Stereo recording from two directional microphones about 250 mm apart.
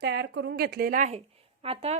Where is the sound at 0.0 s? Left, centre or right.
Right.